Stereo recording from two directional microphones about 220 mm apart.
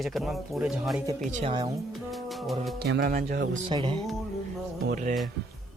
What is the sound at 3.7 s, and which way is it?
Speech, 20° right (ahead or behind).